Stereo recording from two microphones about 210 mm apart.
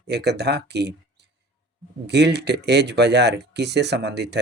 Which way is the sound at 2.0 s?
55° right (ahead or behind).